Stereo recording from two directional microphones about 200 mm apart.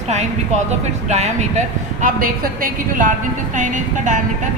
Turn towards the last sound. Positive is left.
turn(degrees=-40)  # may be behind; listen again after turning